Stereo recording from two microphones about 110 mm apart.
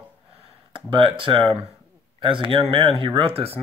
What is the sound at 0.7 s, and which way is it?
Speech, 50° right (ahead or behind).